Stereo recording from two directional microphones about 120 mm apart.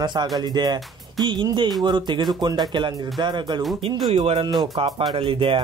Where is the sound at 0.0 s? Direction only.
40° right (ahead or behind).